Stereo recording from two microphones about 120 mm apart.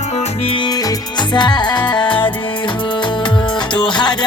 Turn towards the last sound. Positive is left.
turn(degrees=40)  # may be behind; listen again after turning